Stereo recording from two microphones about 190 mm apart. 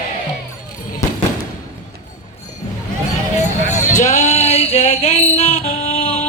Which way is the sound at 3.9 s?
35° left (ahead or behind).